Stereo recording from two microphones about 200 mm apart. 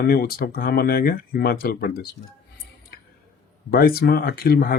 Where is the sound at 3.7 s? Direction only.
50° left (ahead or behind).